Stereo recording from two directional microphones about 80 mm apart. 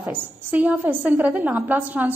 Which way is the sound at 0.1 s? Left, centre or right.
Right.